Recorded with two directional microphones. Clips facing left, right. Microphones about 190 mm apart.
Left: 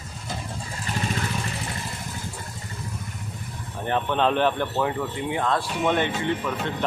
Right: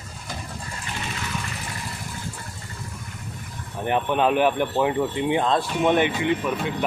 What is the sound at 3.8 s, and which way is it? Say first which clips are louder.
Speech: right 2 dB; 15° right (ahead or behind).